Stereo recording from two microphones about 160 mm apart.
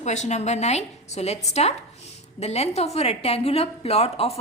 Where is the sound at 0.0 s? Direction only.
45° left (ahead or behind).